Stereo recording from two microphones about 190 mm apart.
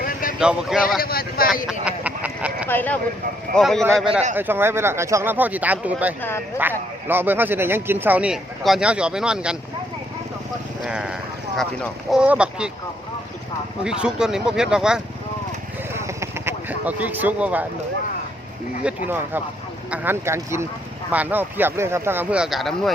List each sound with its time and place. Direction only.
0.0 s a sound: 50° left (ahead or behind)
0.3 s speech: 5° right (ahead or behind)
1.0 s speech: 50° left (ahead or behind)
1.6 s a sound: 5° right (ahead or behind)
2.6 s speech: 10° left (ahead or behind)
4.4 s speech: 10° right (ahead or behind)
10.8 s speech: 5° right (ahead or behind)
13.8 s speech: 5° right (ahead or behind)
15.9 s a sound: 15° right (ahead or behind)
18.8 s speech: 10° right (ahead or behind)